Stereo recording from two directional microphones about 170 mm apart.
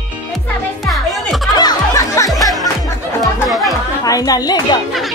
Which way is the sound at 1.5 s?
20° left (ahead or behind).